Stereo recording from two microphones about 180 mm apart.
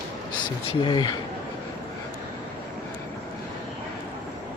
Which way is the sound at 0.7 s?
25° left (ahead or behind).